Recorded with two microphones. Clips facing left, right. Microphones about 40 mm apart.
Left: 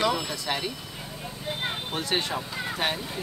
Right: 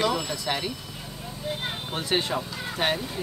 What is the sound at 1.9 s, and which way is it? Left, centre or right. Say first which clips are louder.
Speech: right 3 dB; centre.